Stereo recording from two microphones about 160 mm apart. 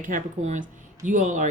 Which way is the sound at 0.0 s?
55° right (ahead or behind).